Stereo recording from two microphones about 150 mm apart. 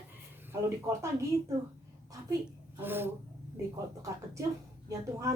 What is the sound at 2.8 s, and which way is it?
Speech, 15° right (ahead or behind).